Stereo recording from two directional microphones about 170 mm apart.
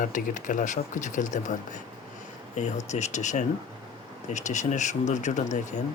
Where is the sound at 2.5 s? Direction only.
40° left (ahead or behind).